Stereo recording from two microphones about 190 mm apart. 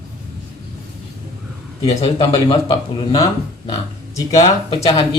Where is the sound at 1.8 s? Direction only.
30° left (ahead or behind).